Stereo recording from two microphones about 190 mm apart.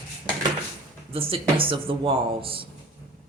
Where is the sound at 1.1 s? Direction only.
30° right (ahead or behind).